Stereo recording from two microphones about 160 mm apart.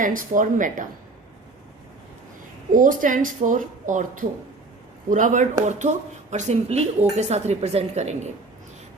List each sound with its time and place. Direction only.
0.0 s speech: 55° right (ahead or behind)
2.7 s speech: 55° right (ahead or behind)